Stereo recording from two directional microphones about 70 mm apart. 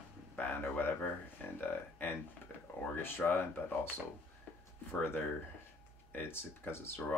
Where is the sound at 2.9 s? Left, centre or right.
Left.